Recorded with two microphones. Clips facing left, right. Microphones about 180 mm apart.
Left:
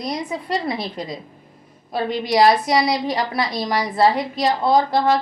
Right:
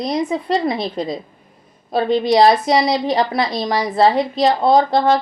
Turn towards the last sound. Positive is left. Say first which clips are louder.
# right 3 dB
turn(degrees=-25)  # may be behind; listen again after turning